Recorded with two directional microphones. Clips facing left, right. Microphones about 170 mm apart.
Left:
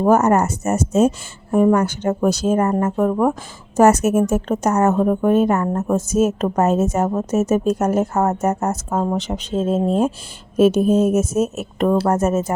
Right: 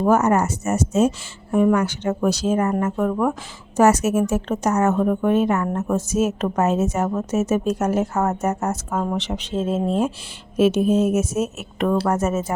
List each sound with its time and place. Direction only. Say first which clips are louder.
0.0 s a woman's voice: left 3 dB; 45° left (ahead or behind)